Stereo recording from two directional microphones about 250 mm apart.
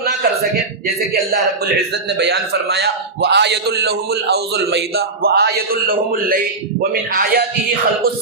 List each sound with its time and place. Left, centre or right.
2.1 s a man's voice: right